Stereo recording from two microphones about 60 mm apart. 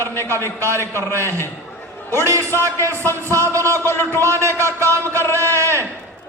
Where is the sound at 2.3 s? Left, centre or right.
Right.